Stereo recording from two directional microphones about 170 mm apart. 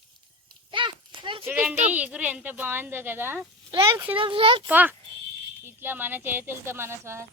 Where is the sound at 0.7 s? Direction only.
30° right (ahead or behind).